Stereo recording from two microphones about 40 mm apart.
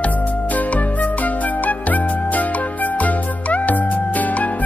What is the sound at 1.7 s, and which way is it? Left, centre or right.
Music, left.